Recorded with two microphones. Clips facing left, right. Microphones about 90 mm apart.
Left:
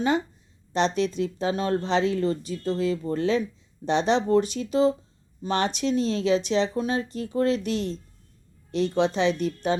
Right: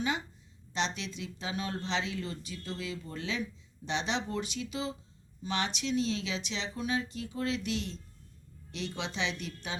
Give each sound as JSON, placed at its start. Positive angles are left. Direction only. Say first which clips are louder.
{"t": 0.7, "sound": "speech", "louder": "left 11 dB", "side_deg": 45}